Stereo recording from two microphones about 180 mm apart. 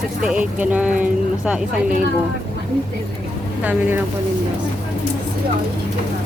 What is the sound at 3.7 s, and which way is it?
Speech, 10° right (ahead or behind).